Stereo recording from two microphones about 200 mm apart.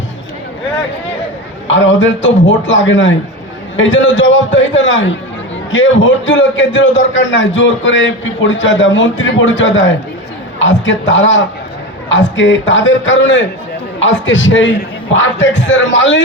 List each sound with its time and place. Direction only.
1.6 s a man's voice: 70° left (ahead or behind)